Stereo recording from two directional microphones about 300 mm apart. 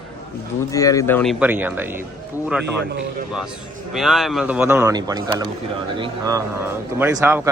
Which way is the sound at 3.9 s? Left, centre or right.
Centre.